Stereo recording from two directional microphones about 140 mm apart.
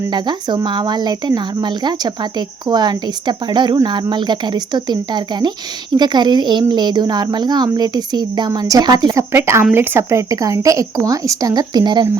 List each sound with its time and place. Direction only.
0.1 s speech: 30° right (ahead or behind)
9.3 s speech: 20° right (ahead or behind)